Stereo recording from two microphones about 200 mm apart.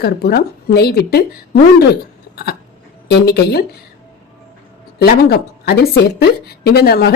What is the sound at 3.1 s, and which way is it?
Speech, 55° left (ahead or behind).